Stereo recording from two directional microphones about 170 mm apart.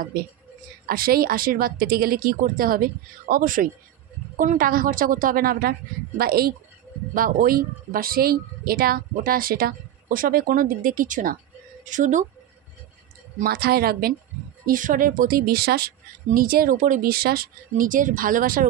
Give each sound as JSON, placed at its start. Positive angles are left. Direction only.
{"t": 0.0, "sound": "speech", "side_deg": -60}
{"t": 13.4, "sound": "speech", "side_deg": -65}
{"t": 14.7, "sound": "speech", "side_deg": -55}